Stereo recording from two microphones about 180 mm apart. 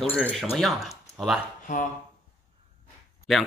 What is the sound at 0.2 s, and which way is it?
Speech, centre (ahead or behind).